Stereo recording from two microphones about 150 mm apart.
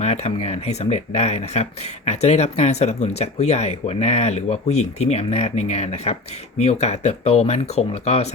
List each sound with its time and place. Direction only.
0.0 s speech: 45° left (ahead or behind)